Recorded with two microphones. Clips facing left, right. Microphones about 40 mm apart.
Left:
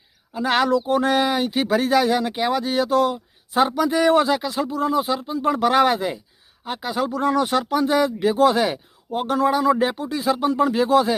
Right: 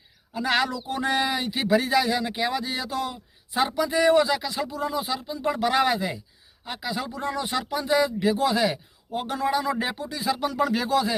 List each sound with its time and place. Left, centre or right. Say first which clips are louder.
0.3 s speech: left 5 dB; left
7.2 s speech: left 10 dB; left
10.3 s speech: left 5 dB; left